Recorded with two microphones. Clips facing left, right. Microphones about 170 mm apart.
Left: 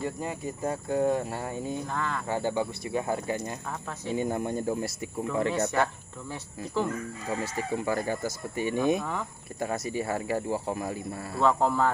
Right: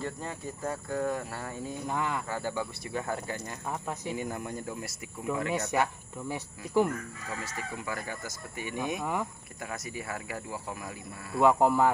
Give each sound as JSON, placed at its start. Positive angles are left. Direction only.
{"t": 0.0, "sound": "speech", "side_deg": 15}
{"t": 1.9, "sound": "speech", "side_deg": -15}
{"t": 2.2, "sound": "speech", "side_deg": 25}
{"t": 5.7, "sound": "speech", "side_deg": -15}
{"t": 7.2, "sound": "speech", "side_deg": 30}
{"t": 11.3, "sound": "speech", "side_deg": -15}